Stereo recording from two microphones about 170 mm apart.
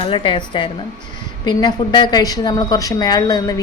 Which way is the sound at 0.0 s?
30° left (ahead or behind).